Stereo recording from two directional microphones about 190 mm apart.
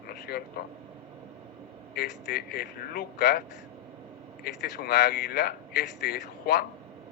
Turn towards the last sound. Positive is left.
turn(degrees=55)  # may be behind; listen again after turning